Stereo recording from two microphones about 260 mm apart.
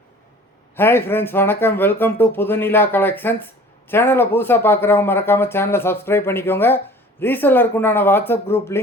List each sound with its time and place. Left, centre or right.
0.8 s speech: centre